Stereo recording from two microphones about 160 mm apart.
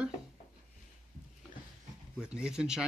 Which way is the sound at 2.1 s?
5° right (ahead or behind).